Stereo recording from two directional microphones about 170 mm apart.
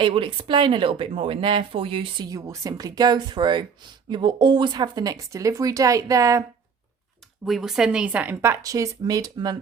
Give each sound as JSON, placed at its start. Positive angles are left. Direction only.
{"t": 0.0, "sound": "speech", "side_deg": -30}
{"t": 7.4, "sound": "a woman's voice", "side_deg": 0}